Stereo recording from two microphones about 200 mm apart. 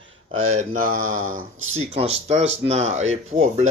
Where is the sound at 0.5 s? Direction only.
40° right (ahead or behind).